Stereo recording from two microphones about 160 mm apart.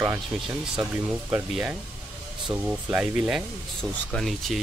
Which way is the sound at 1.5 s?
5° right (ahead or behind).